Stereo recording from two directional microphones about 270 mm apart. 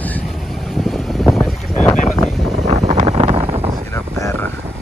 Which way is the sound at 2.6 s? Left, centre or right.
Right.